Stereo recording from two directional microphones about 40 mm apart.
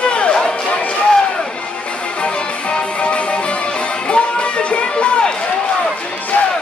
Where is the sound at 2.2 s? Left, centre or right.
Left.